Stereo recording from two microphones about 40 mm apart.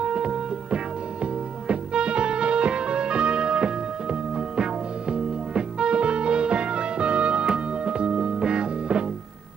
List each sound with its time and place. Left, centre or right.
0.0 s music: right